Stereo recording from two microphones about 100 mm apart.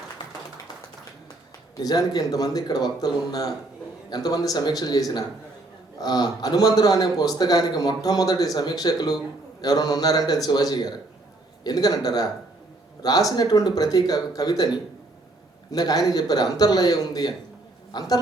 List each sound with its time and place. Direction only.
1.7 s a man's voice: 40° left (ahead or behind)
15.7 s a man's voice: 40° left (ahead or behind)